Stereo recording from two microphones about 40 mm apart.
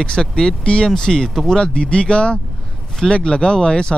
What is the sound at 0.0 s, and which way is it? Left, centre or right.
Speech, left.